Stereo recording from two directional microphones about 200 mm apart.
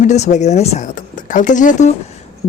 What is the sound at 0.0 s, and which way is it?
Speech, 35° left (ahead or behind).